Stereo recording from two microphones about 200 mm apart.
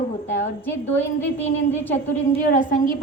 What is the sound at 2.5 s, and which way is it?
Speech, 40° left (ahead or behind).